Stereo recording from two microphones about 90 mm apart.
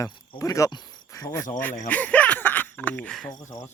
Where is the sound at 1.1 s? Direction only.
35° left (ahead or behind).